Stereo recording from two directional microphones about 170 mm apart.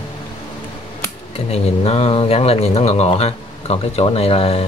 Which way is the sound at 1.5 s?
40° left (ahead or behind).